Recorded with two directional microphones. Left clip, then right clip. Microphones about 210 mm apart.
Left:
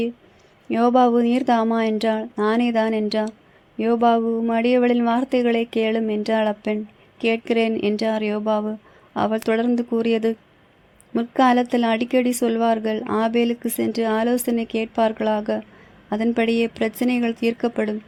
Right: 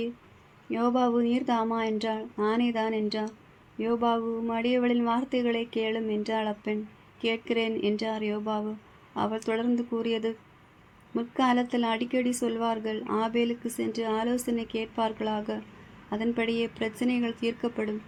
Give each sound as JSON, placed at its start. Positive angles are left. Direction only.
{"t": 0.7, "sound": "speech", "side_deg": 45}